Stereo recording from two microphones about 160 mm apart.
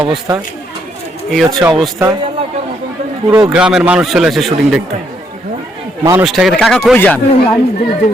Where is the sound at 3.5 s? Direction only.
5° right (ahead or behind).